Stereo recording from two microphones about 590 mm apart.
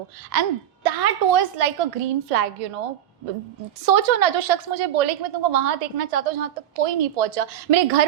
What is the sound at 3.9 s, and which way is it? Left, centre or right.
A woman's voice, right.